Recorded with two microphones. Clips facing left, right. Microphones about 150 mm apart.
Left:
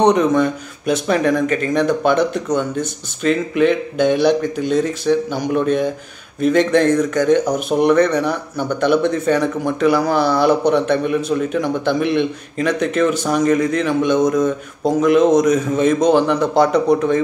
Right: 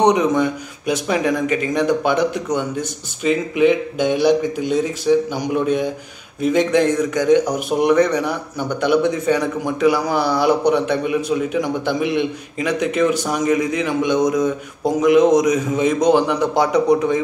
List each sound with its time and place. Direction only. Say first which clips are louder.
0.0 s speech: left 2 dB; 15° right (ahead or behind)